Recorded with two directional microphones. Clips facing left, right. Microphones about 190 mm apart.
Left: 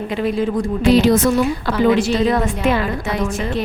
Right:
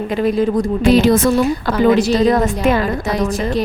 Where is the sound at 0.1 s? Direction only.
40° right (ahead or behind).